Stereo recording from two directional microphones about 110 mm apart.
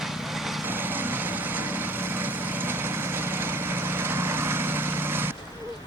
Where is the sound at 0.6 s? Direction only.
20° right (ahead or behind).